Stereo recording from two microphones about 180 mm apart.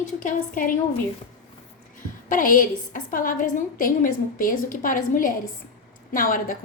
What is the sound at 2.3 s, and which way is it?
A woman's voice, 50° left (ahead or behind).